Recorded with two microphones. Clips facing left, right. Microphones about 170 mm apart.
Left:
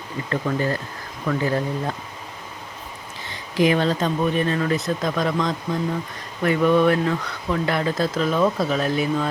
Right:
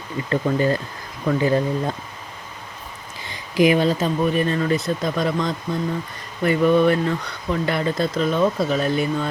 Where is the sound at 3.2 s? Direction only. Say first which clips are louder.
Right 2 dB; 10° right (ahead or behind).